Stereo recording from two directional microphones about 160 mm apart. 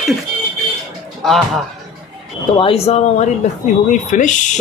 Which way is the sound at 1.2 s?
Centre (ahead or behind).